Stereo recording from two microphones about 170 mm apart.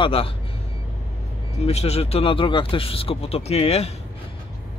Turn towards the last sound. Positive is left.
turn(degrees=35)  # may be behind; listen again after turning